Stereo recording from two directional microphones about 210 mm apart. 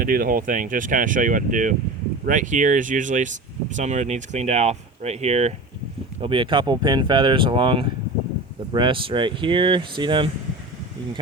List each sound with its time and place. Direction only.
0.0 s speech: 40° right (ahead or behind); by 10.2 s 20° right (ahead or behind)